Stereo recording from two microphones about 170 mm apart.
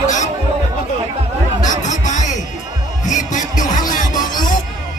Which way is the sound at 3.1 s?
45° left (ahead or behind).